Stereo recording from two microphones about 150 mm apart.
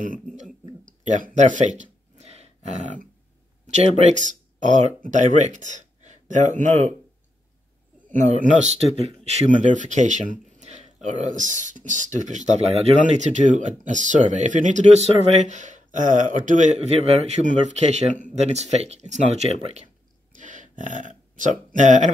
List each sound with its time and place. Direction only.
0.0 s burping: 60° right (ahead or behind)
0.8 s a sound: 60° right (ahead or behind)
3.6 s speech: 50° right (ahead or behind)
8.1 s speech: 55° right (ahead or behind)